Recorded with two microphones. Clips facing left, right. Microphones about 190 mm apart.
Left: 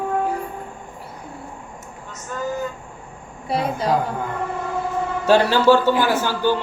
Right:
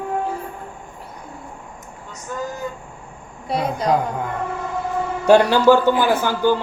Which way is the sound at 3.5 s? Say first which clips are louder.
Right 1 dB; 5° left (ahead or behind).